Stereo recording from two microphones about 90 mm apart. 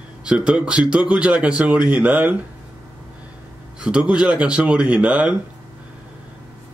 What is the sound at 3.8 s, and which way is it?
A man's voice, 10° right (ahead or behind).